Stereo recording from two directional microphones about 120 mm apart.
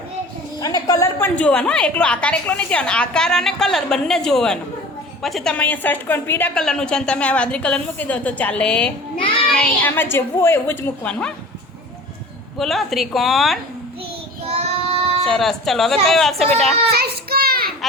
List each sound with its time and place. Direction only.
0.6 s a sound: 30° left (ahead or behind)
1.4 s a woman's voice: 10° left (ahead or behind)
6.5 s a woman's voice: 5° left (ahead or behind)
12.5 s speech: centre (ahead or behind)
14.4 s child singing: 60° right (ahead or behind)
15.2 s speech: centre (ahead or behind)